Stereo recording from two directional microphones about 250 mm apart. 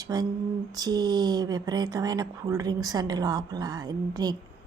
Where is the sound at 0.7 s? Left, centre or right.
Centre.